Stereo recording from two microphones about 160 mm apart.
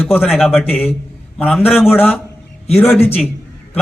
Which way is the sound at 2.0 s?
10° left (ahead or behind).